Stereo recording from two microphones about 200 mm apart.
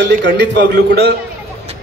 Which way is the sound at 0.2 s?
60° right (ahead or behind).